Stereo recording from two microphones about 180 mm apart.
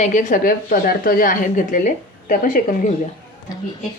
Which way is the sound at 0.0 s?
45° left (ahead or behind).